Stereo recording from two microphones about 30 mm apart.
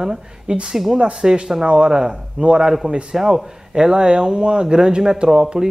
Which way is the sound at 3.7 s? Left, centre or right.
Right.